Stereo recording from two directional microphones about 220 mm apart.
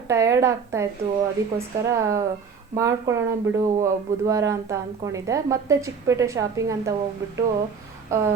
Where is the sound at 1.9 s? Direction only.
15° right (ahead or behind).